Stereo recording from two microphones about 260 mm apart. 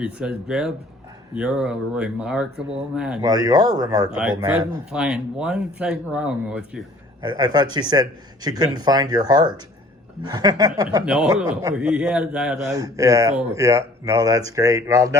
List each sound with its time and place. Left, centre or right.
0.0 s speech: centre
3.2 s speech: centre
4.1 s speech: centre
7.2 s speech: centre